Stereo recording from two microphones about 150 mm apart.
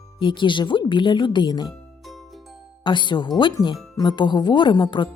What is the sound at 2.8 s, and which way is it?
A woman's voice, 30° left (ahead or behind).